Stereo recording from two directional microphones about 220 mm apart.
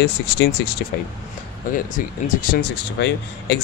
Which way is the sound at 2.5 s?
50° left (ahead or behind).